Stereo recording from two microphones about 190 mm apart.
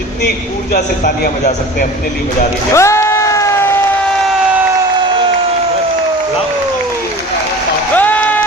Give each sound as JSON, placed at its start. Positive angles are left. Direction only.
{"t": 0.7, "sound": "a man's voice", "side_deg": 50}
{"t": 2.7, "sound": "a sound", "side_deg": 15}
{"t": 7.9, "sound": "applause", "side_deg": 10}